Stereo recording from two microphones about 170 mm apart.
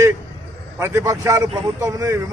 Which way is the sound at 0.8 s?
15° right (ahead or behind).